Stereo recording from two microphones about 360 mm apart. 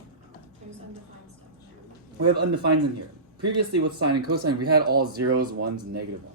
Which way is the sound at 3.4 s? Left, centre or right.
Right.